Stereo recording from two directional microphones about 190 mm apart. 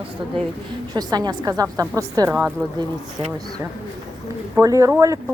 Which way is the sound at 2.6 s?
5° left (ahead or behind).